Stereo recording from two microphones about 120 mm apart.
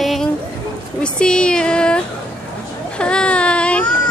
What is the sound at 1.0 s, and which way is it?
Speech, 5° left (ahead or behind).